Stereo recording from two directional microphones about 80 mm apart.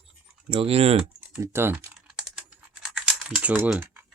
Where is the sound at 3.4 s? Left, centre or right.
Right.